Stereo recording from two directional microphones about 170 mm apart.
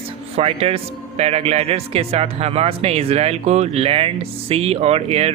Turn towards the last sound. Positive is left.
turn(degrees=-35)  # may be behind; listen again after turning